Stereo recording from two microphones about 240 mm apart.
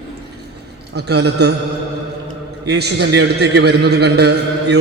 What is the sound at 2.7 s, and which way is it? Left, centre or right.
A man's voice, right.